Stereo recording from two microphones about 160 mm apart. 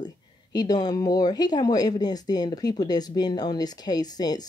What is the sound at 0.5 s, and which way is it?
Speech, 25° left (ahead or behind).